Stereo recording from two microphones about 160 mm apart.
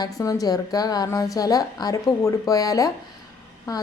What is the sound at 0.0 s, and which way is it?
A woman's voice, 20° left (ahead or behind).